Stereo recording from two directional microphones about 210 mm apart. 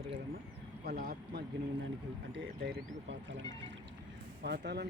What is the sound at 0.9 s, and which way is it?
Speech, 45° right (ahead or behind).